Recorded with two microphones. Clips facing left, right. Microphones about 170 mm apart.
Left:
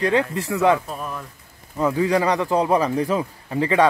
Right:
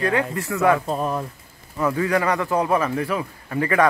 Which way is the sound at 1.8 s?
15° left (ahead or behind).